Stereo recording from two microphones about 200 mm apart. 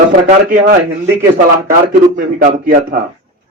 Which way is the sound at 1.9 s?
45° right (ahead or behind).